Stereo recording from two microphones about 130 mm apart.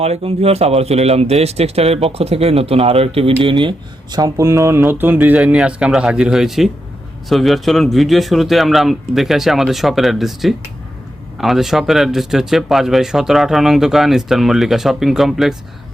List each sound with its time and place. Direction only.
0.0 s speech: 50° right (ahead or behind); by 15.5 s centre (ahead or behind)